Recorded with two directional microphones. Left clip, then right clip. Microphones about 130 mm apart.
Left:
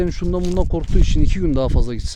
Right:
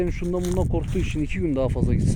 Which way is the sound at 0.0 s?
40° left (ahead or behind).